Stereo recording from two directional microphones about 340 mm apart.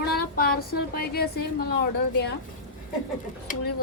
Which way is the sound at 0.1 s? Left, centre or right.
Left.